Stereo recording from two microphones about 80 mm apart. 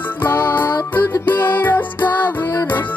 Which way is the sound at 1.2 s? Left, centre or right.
Left.